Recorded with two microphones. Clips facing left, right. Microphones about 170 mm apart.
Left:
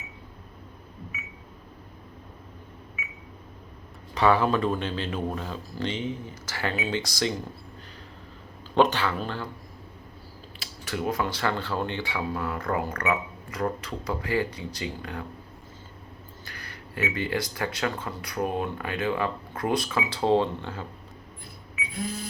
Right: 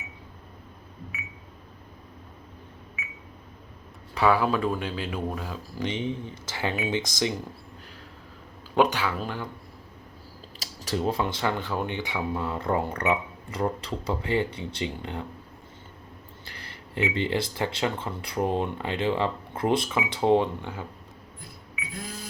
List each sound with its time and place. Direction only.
4.1 s speech: 10° right (ahead or behind)
8.7 s speech: 10° right (ahead or behind)
10.6 s speech: 35° right (ahead or behind)
16.5 s speech: 25° right (ahead or behind)